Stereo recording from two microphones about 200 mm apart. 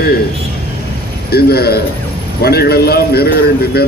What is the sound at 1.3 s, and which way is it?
A man's voice, 50° left (ahead or behind).